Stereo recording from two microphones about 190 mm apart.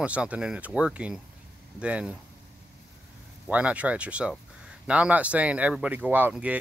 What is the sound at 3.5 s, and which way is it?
Speech, 5° right (ahead or behind).